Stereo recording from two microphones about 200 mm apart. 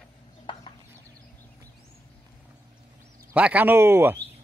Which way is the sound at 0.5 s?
25° left (ahead or behind).